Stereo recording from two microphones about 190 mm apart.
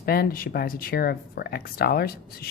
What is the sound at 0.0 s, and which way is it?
Speech, 50° left (ahead or behind).